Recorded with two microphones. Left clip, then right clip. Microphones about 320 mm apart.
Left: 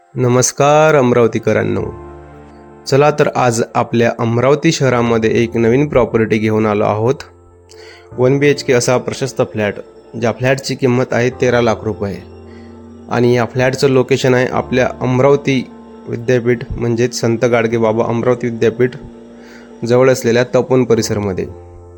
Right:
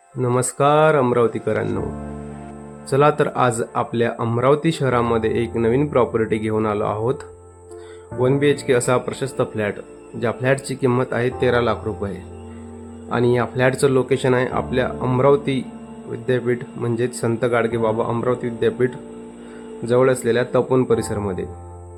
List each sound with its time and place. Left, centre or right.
0.2 s speech: centre
2.8 s speech: centre
8.2 s speech: centre